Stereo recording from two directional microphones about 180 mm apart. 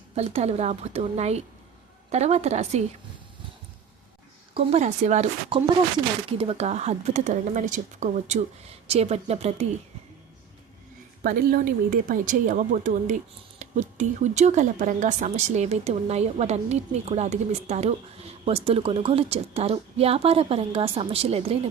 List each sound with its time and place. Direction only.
0.2 s speech: 35° right (ahead or behind)
4.5 s speech: 40° right (ahead or behind)
11.2 s speech: 55° right (ahead or behind); by 21.7 s 35° right (ahead or behind)